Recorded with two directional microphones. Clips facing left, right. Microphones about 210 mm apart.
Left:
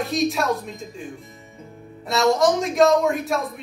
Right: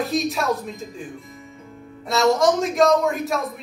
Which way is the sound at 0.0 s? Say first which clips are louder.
Left 1 dB; centre (ahead or behind).